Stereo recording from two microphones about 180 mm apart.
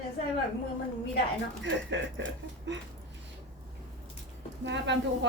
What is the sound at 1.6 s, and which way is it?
Cutlery, 80° right.